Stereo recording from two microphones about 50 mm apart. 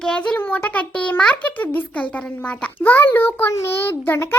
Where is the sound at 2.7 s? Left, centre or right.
Left.